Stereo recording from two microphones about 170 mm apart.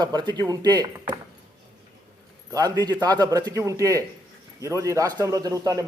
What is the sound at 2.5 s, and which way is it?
A man's voice, 25° right (ahead or behind).